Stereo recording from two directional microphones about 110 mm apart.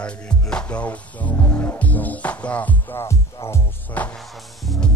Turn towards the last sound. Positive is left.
turn(degrees=20)  # may be behind; listen again after turning